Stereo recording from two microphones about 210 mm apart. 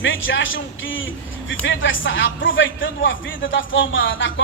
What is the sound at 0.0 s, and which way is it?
A man's voice, 65° left (ahead or behind).